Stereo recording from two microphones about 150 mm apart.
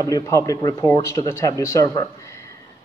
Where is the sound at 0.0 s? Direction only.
20° left (ahead or behind).